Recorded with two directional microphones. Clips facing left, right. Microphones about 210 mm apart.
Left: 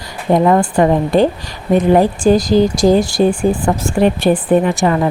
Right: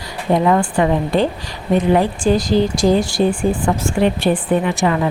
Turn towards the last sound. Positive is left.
turn(degrees=40)  # may be behind; listen again after turning